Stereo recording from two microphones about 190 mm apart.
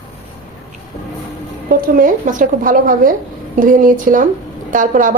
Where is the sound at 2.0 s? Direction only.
45° right (ahead or behind).